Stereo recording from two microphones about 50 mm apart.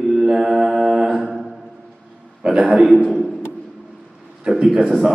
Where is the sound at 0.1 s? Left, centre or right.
Centre.